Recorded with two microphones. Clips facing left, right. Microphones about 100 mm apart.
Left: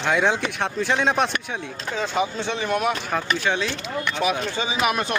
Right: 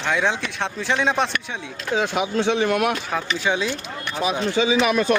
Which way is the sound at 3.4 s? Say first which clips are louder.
Right 4 dB; 10° right (ahead or behind).